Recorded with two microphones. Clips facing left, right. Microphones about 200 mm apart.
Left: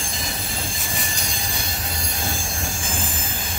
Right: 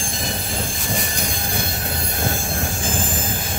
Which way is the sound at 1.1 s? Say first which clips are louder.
Right 5 dB; 55° right (ahead or behind).